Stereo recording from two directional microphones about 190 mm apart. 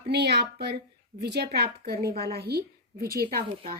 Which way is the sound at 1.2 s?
60° right (ahead or behind).